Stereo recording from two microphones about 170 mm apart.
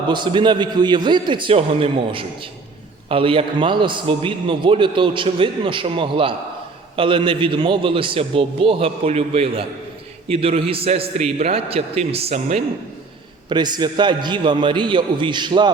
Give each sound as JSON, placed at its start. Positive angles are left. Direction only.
{"t": 0.1, "sound": "a man's voice", "side_deg": -30}
{"t": 13.5, "sound": "a man's voice", "side_deg": -25}